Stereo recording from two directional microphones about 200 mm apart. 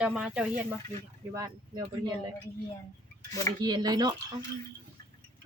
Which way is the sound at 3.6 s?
20° right (ahead or behind).